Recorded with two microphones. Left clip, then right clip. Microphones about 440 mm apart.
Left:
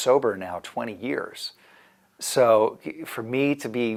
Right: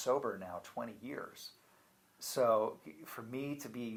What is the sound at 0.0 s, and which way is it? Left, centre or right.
Speech, left.